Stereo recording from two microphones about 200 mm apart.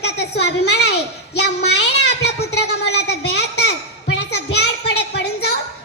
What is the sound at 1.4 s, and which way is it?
Child singing, 55° left (ahead or behind).